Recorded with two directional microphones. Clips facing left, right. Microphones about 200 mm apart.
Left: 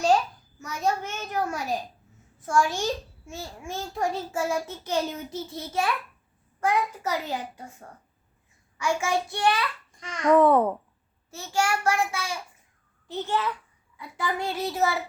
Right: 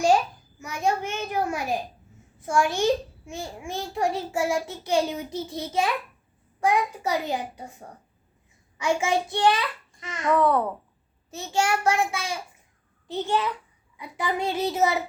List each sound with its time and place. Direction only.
0.6 s a child's voice: 15° right (ahead or behind)
10.3 s a child's voice: 20° left (ahead or behind)
11.3 s a child's voice: 20° right (ahead or behind)